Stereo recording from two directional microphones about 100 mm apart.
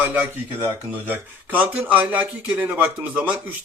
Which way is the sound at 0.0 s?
15° right (ahead or behind).